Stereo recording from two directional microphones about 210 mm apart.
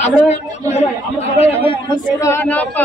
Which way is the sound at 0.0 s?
35° left (ahead or behind).